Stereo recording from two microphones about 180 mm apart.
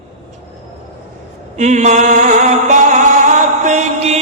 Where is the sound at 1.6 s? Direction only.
40° right (ahead or behind).